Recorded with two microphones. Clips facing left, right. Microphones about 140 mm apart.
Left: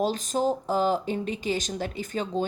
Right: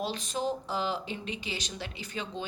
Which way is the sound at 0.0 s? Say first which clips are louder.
Left 7 dB; 45° left (ahead or behind).